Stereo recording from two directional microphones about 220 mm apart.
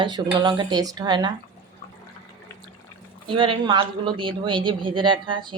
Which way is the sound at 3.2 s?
25° right (ahead or behind).